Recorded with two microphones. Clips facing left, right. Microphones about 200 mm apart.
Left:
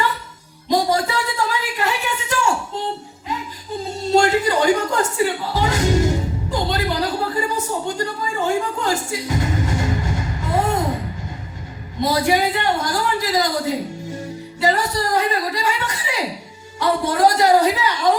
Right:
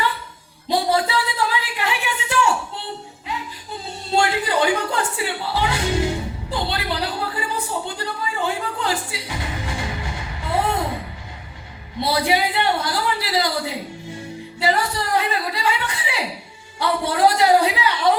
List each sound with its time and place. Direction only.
0.7 s a sound: 45° left (ahead or behind)
3.8 s music: 40° left (ahead or behind)
12.0 s a man's voice: 45° left (ahead or behind)